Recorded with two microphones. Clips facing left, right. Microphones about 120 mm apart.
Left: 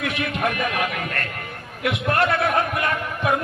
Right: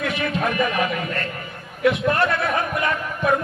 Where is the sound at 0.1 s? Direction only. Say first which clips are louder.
Right 1 dB; 60° left (ahead or behind).